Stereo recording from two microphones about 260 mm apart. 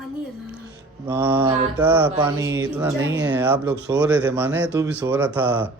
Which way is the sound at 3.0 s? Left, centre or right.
Right.